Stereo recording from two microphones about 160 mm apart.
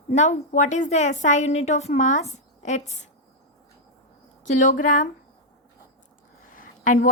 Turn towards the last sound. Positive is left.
turn(degrees=55)  # may be behind; listen again after turning